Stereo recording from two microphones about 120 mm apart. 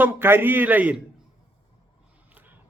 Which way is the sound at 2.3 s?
15° right (ahead or behind).